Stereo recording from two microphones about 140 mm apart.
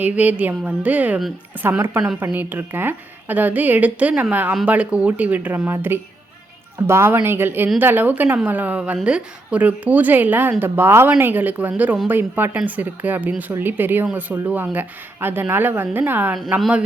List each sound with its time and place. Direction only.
0.0 s a woman's voice: 10° right (ahead or behind)